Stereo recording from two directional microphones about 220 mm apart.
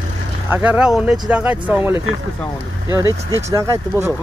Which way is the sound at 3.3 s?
15° right (ahead or behind).